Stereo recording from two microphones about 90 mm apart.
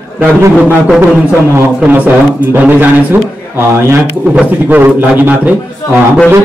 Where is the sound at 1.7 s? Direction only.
20° right (ahead or behind).